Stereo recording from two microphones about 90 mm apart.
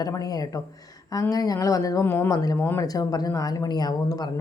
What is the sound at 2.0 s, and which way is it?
Speech, 30° left (ahead or behind).